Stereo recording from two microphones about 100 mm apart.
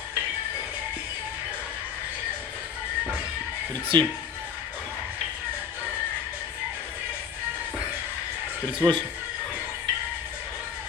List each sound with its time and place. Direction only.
3.9 s speech: 45° right (ahead or behind)
8.8 s speech: 45° right (ahead or behind)